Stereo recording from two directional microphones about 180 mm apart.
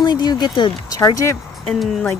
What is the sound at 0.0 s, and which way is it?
Speech, 25° left (ahead or behind).